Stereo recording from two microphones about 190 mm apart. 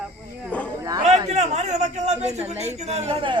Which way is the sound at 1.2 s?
35° right (ahead or behind).